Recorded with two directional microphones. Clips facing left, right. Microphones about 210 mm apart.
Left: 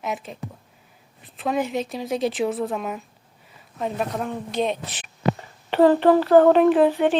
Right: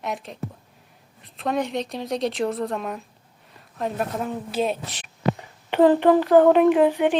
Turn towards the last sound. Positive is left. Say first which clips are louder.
# left 1 dB
turn(degrees=-15)  # may be behind; listen again after turning